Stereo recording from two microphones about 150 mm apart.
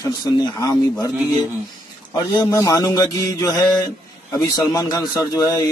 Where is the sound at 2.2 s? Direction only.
15° left (ahead or behind).